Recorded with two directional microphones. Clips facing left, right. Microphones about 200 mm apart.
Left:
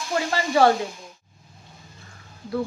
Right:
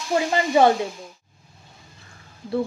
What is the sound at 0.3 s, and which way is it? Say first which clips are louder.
Speech: right 1 dB; 20° right (ahead or behind).